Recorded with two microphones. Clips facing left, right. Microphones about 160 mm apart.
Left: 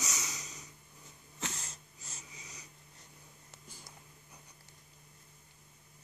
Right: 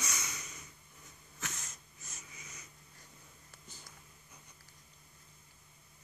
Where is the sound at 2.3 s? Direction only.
15° left (ahead or behind).